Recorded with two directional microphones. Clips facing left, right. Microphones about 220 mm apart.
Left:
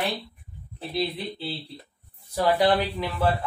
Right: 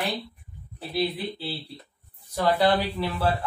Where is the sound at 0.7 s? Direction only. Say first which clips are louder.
Right 1 dB; centre (ahead or behind).